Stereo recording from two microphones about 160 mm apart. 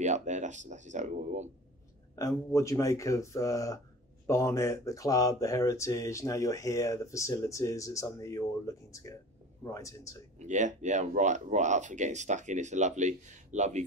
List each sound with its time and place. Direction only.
0.0 s speech: 50° right (ahead or behind)
2.1 s speech: 20° left (ahead or behind)
10.4 s speech: 50° right (ahead or behind)